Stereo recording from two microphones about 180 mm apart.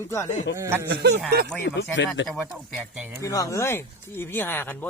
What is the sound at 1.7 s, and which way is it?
Speech, 85° left.